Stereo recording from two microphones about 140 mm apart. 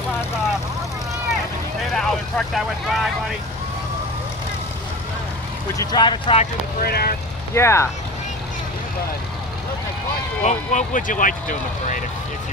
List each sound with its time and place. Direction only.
2.0 s speech: centre (ahead or behind)
5.8 s speech: 30° left (ahead or behind)
6.8 s speech: 90° left
7.5 s speech: 20° left (ahead or behind)
10.4 s speech: 55° left (ahead or behind)